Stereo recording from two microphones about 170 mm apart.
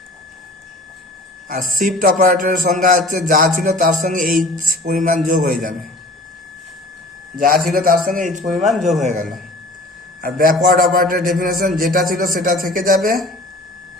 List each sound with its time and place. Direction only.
1.5 s a man's voice: 50° right (ahead or behind)
7.3 s a man's voice: 55° right (ahead or behind)